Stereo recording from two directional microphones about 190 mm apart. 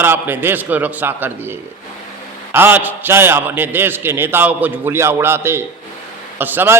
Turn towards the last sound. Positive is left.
turn(degrees=-10)  # may be behind; listen again after turning